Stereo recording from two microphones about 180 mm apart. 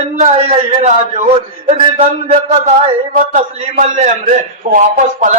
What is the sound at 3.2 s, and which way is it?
A man's voice, 45° right (ahead or behind).